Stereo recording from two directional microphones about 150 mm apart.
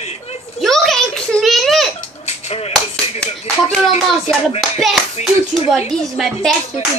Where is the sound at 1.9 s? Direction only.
45° left (ahead or behind).